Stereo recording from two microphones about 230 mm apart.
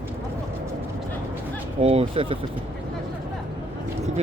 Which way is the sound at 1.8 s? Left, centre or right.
Right.